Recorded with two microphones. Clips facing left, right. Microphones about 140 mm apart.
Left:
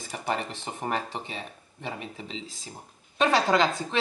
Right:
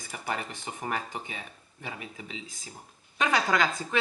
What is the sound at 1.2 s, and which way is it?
Speech, 5° right (ahead or behind).